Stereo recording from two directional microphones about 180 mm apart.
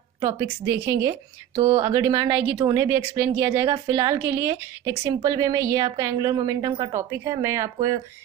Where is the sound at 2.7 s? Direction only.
15° right (ahead or behind).